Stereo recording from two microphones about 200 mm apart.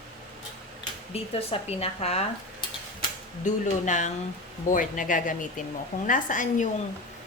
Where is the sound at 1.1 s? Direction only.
30° left (ahead or behind).